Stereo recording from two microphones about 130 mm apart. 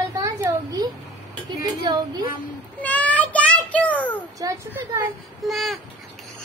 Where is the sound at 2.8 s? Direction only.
10° left (ahead or behind).